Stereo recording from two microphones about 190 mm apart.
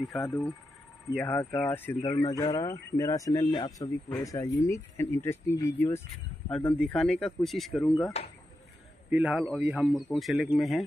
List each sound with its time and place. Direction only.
0.0 s speech: centre (ahead or behind)
8.2 s speech: 35° left (ahead or behind)
9.1 s speech: 5° right (ahead or behind)